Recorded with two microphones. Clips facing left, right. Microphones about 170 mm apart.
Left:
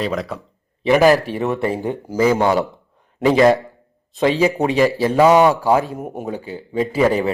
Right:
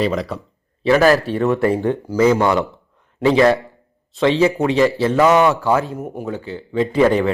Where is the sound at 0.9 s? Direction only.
15° left (ahead or behind).